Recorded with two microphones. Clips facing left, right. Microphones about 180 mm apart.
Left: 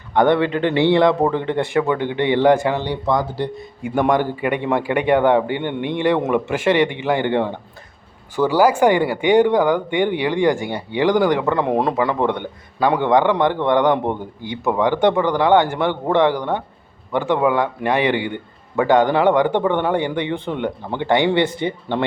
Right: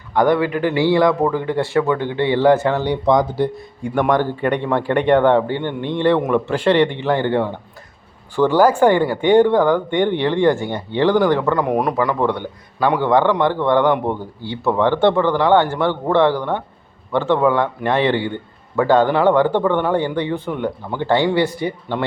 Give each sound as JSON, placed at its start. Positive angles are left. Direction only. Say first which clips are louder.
{"t": 0.1, "sound": "a man's voice", "louder": "even", "side_deg": 25}
{"t": 2.8, "sound": "speech", "louder": "right 4 dB", "side_deg": -15}
{"t": 3.9, "sound": "a man's voice", "louder": "even", "side_deg": 25}
{"t": 4.2, "sound": "a man's voice", "louder": "right 2 dB", "side_deg": 10}